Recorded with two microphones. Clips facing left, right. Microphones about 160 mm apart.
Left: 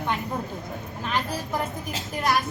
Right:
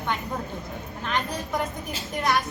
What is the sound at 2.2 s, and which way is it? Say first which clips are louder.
Speech: even; 5° left (ahead or behind).